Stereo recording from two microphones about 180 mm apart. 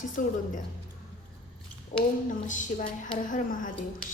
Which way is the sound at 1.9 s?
45° left (ahead or behind).